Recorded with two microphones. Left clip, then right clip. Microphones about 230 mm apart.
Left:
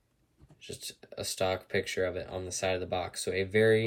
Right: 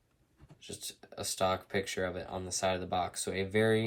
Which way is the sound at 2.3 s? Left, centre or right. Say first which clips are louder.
Left 1 dB; centre.